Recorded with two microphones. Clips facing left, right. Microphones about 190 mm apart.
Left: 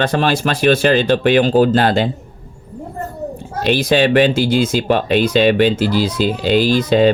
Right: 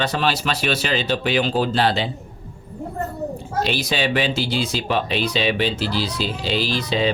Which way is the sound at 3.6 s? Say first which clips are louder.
Left 11 dB; 50° left (ahead or behind).